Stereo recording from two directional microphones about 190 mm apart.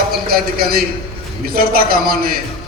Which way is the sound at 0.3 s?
50° right (ahead or behind).